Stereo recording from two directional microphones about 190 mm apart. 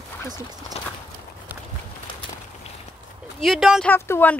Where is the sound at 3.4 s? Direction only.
Centre (ahead or behind).